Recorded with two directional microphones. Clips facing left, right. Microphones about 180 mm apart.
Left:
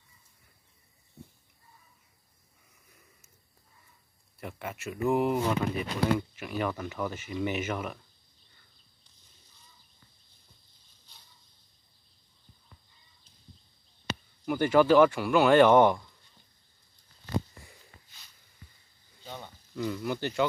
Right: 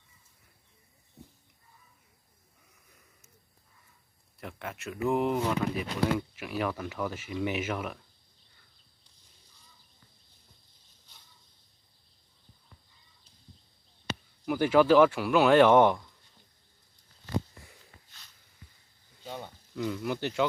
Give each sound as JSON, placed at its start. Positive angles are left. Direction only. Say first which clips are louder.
{"t": 4.4, "sound": "speech", "louder": "left 1 dB", "side_deg": 5}
{"t": 14.4, "sound": "speech", "louder": "even", "side_deg": 0}
{"t": 19.2, "sound": "a sound", "louder": "right 3 dB", "side_deg": -5}